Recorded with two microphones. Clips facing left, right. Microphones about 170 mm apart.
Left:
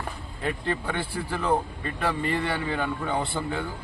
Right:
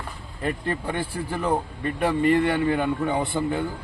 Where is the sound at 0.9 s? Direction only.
10° right (ahead or behind).